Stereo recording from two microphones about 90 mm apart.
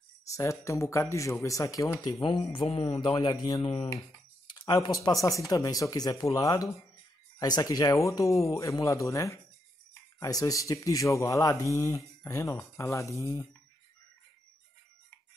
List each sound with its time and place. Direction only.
0.3 s speech: 35° left (ahead or behind)
2.5 s speech: 70° left (ahead or behind); by 3.5 s 50° left (ahead or behind)
3.6 s speech: 90° left
5.0 s speech: 40° left (ahead or behind)